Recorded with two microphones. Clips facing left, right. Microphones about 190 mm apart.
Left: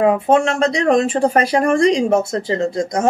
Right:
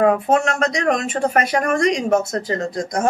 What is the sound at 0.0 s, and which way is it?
Speech, 25° left (ahead or behind).